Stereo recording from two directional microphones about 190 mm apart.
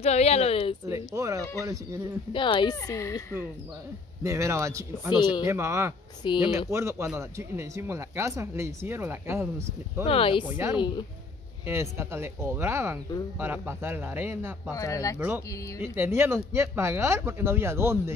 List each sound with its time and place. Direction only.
0.0 s speech: 35° left (ahead or behind)
0.8 s speech: 15° right (ahead or behind)
2.3 s speech: 25° left (ahead or behind)
4.2 s speech: 15° right (ahead or behind)
5.1 s speech: 25° left (ahead or behind)
5.4 s speech: 15° right (ahead or behind)
6.2 s speech: 25° left (ahead or behind)
6.7 s speech: 15° right (ahead or behind)
10.0 s speech: 30° left (ahead or behind)
11.6 s speech: 15° right (ahead or behind)
14.7 s speech: 15° left (ahead or behind)
15.1 s speech: 10° right (ahead or behind)